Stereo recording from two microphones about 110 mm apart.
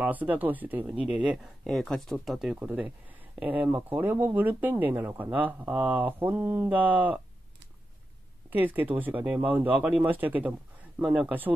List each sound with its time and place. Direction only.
0.0 s speech: 15° right (ahead or behind)
1.6 s speech: 5° left (ahead or behind)
2.5 s speech: 15° right (ahead or behind)
8.5 s speech: 15° right (ahead or behind)